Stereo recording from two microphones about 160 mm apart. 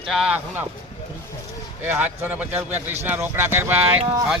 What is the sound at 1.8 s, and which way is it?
Speech, 10° right (ahead or behind).